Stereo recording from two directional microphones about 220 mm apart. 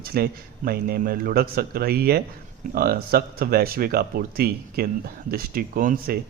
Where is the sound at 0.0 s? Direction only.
45° right (ahead or behind).